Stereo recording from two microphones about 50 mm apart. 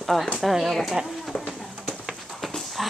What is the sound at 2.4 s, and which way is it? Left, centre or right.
Horse, centre.